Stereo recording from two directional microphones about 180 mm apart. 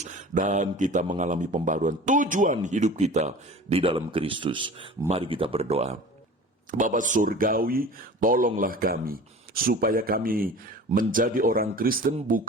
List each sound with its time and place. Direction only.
0.0 s speech: 40° right (ahead or behind)
6.7 s speech: 45° right (ahead or behind)